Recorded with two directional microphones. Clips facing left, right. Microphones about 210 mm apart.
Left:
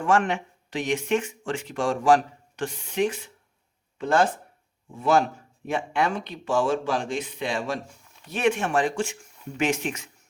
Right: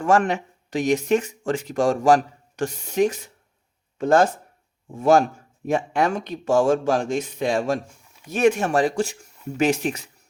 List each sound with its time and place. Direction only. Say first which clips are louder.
0.0 s a man's voice: right 3 dB; 40° right (ahead or behind)